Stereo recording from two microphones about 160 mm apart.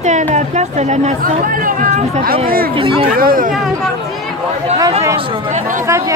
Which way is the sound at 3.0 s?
65° right (ahead or behind).